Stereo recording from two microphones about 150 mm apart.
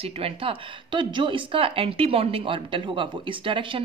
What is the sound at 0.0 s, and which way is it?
Speech, 40° right (ahead or behind).